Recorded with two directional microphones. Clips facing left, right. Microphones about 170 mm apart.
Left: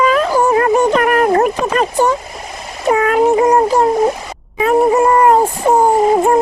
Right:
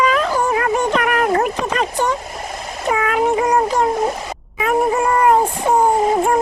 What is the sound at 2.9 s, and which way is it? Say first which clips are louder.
Speech: left 6 dB; 40° left (ahead or behind).